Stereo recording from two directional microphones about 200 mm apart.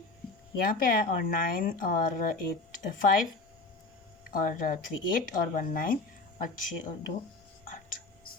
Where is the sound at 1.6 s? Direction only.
45° left (ahead or behind).